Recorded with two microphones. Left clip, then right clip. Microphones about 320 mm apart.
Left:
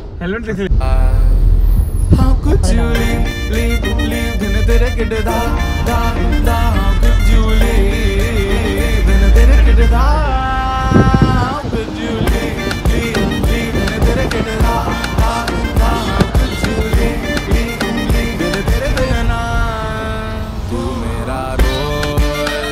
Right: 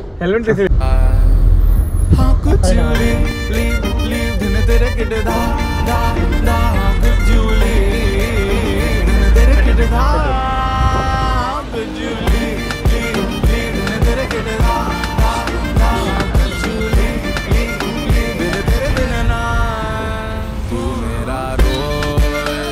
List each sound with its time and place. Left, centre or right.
2.1 s vehicle: centre
4.6 s music: centre
9.9 s music: centre
21.5 s music: centre